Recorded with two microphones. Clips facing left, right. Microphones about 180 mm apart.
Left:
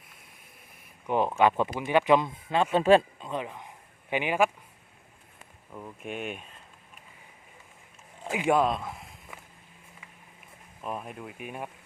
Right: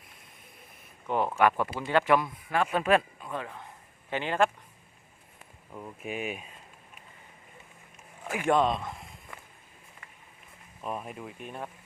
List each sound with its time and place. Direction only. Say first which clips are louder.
1.0 s speech: left 2 dB; 15° left (ahead or behind)
5.7 s speech: right 1 dB; 5° right (ahead or behind)
8.2 s speech: left 1 dB; 15° left (ahead or behind)
8.5 s a sound: even; 5° left (ahead or behind)
10.8 s speech: even; centre (ahead or behind)